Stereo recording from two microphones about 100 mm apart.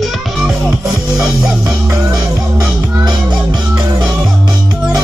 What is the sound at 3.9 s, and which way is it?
Music, 5° right (ahead or behind).